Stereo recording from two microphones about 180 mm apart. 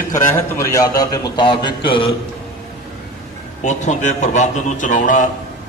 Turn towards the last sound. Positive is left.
turn(degrees=45)  # may be behind; listen again after turning